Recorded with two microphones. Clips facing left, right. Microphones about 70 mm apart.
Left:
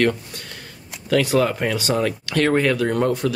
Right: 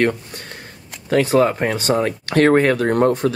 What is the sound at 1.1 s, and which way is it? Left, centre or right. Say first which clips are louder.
Speech: right 3 dB; right.